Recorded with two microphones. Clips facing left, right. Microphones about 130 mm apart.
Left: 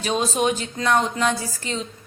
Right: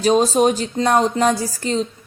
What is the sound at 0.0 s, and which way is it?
A woman's voice, 40° right (ahead or behind).